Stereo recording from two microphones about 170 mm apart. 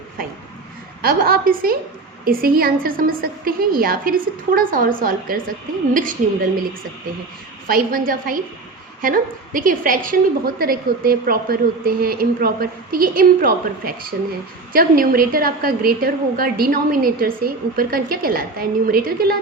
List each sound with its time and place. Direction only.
0.2 s a woman's voice: 60° right (ahead or behind)
7.7 s a woman's voice: 55° right (ahead or behind)